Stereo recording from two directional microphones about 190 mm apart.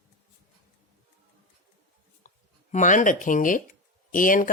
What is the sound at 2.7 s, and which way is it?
Speech, 40° left (ahead or behind).